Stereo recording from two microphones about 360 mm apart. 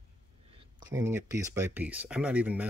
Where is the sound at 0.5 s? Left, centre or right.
Centre.